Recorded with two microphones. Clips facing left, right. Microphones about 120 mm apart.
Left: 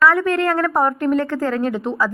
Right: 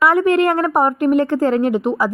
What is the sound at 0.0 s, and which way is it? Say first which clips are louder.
A woman's voice: right 3 dB; 15° right (ahead or behind).